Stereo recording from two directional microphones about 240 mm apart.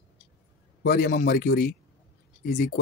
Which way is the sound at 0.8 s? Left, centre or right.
Left.